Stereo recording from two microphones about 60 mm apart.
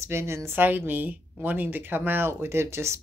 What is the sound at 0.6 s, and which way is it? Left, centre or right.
Speech, right.